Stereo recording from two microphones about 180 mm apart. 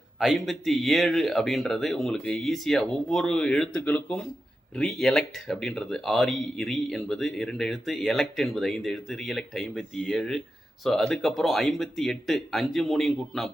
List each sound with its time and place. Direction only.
0.2 s speech: centre (ahead or behind)